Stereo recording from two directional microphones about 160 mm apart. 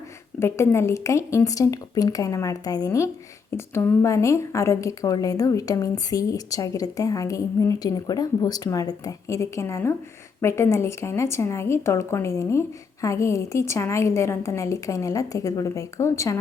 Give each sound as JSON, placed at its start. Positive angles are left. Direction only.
{"t": 0.3, "sound": "a woman's voice", "side_deg": 15}